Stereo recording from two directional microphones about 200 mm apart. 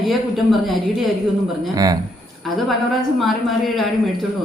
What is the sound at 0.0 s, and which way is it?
A woman's voice, centre (ahead or behind).